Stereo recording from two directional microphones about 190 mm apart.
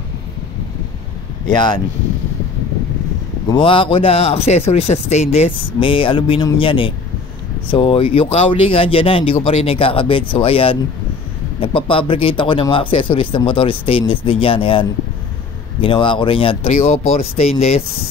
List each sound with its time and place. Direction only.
1.5 s speech: 25° left (ahead or behind)
3.4 s speech: 25° left (ahead or behind)